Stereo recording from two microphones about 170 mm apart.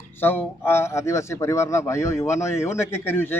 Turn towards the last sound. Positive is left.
turn(degrees=15)  # may be behind; listen again after turning